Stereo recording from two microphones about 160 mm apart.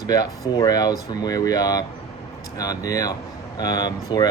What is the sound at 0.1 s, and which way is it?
Speech, 25° left (ahead or behind).